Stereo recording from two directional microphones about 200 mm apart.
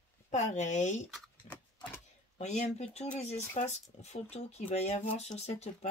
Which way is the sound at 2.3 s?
35° left (ahead or behind).